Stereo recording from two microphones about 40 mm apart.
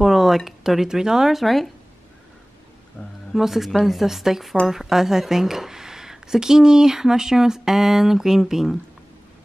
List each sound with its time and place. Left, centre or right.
0.0 s a sound: centre
0.5 s speech: centre
1.4 s speech: centre
3.0 s speech: left
3.3 s speech: centre